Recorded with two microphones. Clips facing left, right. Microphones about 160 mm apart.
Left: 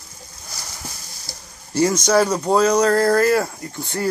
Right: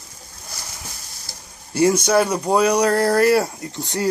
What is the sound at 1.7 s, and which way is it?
Speech, 10° right (ahead or behind).